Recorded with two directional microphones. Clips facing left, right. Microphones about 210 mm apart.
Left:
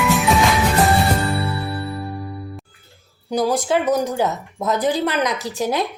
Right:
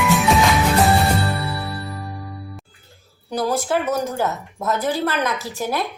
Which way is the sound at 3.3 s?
15° left (ahead or behind).